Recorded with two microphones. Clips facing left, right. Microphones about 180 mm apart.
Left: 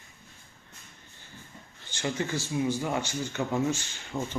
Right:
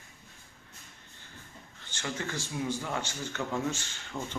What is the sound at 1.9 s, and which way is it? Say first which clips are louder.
Speech: left 5 dB; 15° left (ahead or behind).